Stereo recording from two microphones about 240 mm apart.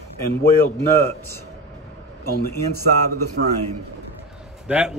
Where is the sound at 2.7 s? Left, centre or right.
Right.